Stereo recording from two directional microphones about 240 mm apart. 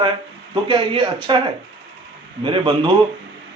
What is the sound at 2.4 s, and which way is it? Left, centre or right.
Speech, centre.